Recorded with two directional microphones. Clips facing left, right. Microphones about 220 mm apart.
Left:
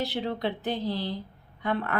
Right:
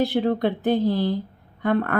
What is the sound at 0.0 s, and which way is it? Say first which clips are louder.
Speech: right 8 dB; 50° right (ahead or behind).